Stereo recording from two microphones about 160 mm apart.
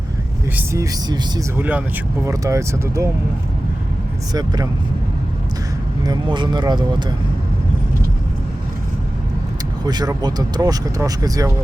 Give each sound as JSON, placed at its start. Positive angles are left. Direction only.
{"t": 0.5, "sound": "speech", "side_deg": -20}
{"t": 1.5, "sound": "speech", "side_deg": -10}
{"t": 4.3, "sound": "speech", "side_deg": -25}
{"t": 6.0, "sound": "speech", "side_deg": -25}
{"t": 9.8, "sound": "speech", "side_deg": -25}